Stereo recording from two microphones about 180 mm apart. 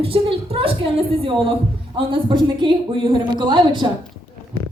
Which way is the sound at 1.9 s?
30° right (ahead or behind).